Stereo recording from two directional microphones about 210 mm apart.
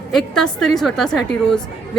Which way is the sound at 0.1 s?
Centre (ahead or behind).